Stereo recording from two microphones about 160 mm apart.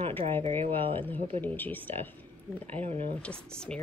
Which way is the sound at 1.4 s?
10° left (ahead or behind).